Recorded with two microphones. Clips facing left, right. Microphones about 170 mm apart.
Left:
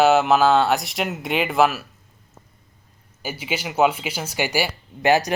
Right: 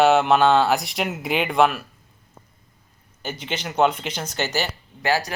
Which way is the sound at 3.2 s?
10° left (ahead or behind).